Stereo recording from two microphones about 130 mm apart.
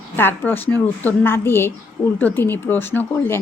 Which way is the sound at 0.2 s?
15° left (ahead or behind).